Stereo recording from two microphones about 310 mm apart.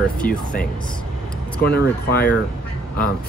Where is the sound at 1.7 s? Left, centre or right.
Left.